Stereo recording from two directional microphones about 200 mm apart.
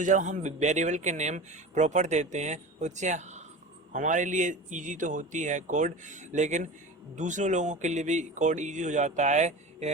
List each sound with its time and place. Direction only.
0.0 s speech: 40° right (ahead or behind)